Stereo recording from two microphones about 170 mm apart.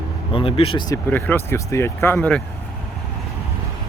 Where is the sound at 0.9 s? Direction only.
10° left (ahead or behind).